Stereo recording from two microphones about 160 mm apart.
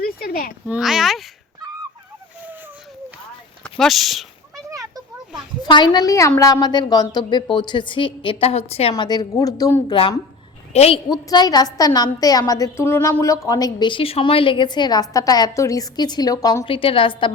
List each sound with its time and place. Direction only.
0.0 s a sound: 65° left (ahead or behind)
0.7 s speech: 5° right (ahead or behind)
3.6 s speech: centre (ahead or behind)
4.5 s a sound: 20° right (ahead or behind)
5.6 s a woman's voice: 30° left (ahead or behind)
9.0 s a woman's voice: 25° left (ahead or behind)
10.7 s a woman's voice: 40° left (ahead or behind)
11.1 s a woman's voice: 25° left (ahead or behind)